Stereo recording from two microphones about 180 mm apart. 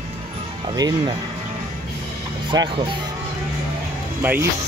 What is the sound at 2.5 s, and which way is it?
Speech, 25° right (ahead or behind).